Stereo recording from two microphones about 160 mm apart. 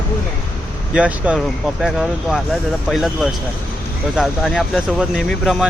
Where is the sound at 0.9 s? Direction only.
10° right (ahead or behind).